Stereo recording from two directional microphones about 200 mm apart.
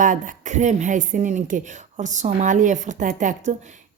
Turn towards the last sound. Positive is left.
turn(degrees=-35)  # may be behind; listen again after turning